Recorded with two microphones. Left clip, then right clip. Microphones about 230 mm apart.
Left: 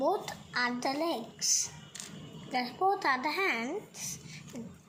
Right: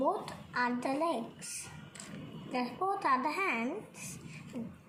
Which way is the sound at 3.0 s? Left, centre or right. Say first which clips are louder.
Left 1 dB; left.